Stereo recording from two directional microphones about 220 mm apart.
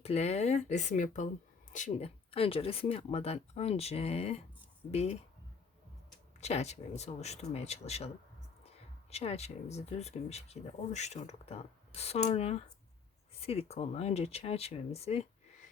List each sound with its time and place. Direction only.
0.0 s speech: 30° left (ahead or behind)
6.4 s speech: 30° left (ahead or behind)